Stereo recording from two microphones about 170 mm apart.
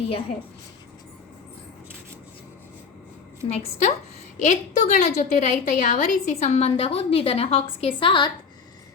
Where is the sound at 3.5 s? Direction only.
40° left (ahead or behind).